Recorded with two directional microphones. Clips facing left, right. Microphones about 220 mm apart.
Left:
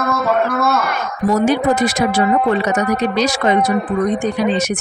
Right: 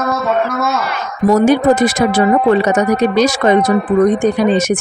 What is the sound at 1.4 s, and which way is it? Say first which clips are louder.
Speech: right 4 dB; 50° right (ahead or behind).